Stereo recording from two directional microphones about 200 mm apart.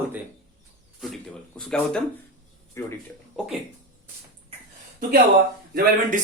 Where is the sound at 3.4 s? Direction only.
5° right (ahead or behind).